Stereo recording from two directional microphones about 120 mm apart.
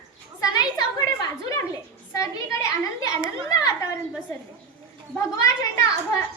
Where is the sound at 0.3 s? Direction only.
30° left (ahead or behind).